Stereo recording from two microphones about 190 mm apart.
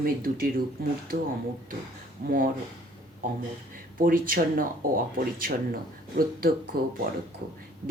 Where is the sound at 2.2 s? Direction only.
50° right (ahead or behind).